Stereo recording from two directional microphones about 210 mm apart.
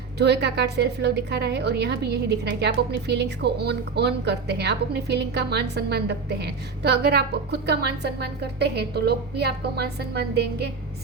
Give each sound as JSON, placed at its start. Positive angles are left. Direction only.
{"t": 0.2, "sound": "a woman's voice", "side_deg": -55}